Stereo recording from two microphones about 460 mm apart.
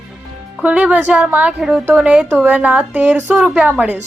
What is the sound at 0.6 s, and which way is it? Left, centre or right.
A woman's voice, centre.